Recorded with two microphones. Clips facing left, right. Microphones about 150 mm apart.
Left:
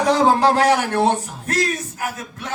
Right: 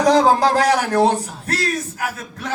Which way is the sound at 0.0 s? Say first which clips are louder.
Right 2 dB; 35° right (ahead or behind).